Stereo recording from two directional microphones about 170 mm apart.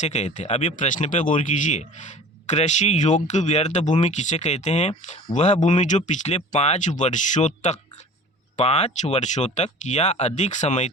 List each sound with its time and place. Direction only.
0.0 s speech: 40° left (ahead or behind)